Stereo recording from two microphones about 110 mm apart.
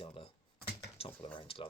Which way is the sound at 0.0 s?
55° left (ahead or behind).